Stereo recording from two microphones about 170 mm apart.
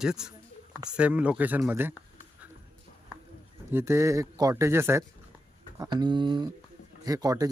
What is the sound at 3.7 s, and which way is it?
Speech, 15° right (ahead or behind).